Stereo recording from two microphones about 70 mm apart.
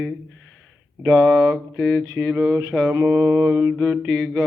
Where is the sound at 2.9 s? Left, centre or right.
Right.